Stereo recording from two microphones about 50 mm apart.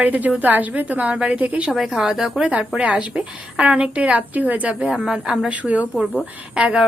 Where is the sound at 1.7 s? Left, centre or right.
Centre.